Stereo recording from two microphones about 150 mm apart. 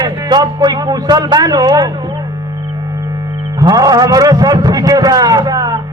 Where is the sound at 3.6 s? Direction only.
25° right (ahead or behind).